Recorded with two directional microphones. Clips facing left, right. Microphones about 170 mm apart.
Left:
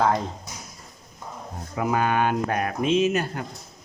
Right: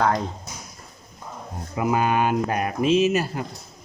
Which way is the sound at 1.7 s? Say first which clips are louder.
Right 2 dB; 10° right (ahead or behind).